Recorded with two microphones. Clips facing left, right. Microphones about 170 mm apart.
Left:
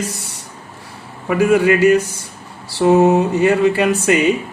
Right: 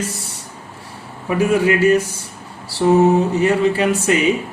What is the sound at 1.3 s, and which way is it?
Speech, 70° left (ahead or behind).